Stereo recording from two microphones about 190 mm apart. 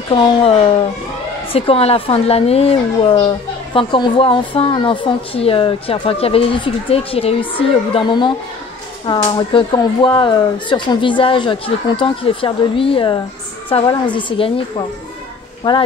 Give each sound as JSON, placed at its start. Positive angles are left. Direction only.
{"t": 0.1, "sound": "a child's voice", "side_deg": 30}
{"t": 15.7, "sound": "speech", "side_deg": 25}